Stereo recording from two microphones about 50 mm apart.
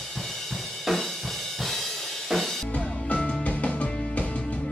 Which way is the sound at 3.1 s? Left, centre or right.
Left.